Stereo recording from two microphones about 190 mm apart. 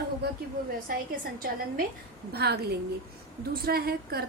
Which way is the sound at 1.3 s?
50° right (ahead or behind).